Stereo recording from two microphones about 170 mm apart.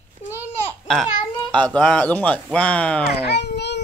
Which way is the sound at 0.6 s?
Centre (ahead or behind).